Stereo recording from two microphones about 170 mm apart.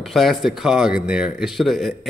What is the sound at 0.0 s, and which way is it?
A man's voice, centre (ahead or behind).